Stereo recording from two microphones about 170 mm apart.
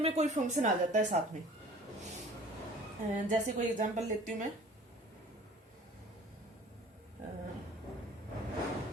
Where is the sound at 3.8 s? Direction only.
45° right (ahead or behind).